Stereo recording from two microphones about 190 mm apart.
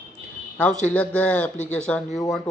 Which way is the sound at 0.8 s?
5° left (ahead or behind).